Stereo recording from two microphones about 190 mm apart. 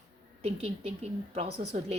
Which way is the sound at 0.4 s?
30° right (ahead or behind).